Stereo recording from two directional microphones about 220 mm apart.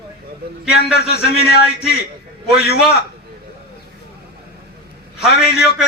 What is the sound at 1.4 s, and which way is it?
A man's voice, 45° left (ahead or behind).